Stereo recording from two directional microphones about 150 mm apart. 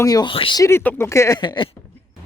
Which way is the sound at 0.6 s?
15° left (ahead or behind).